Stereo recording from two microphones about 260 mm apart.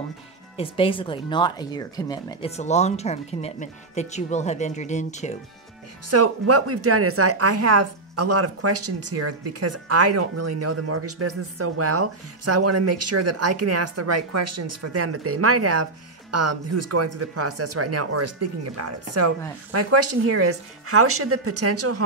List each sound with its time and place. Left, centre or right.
0.6 s speech: left
6.0 s a woman's voice: right